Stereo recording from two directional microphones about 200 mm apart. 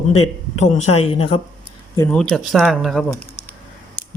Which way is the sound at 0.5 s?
35° left (ahead or behind).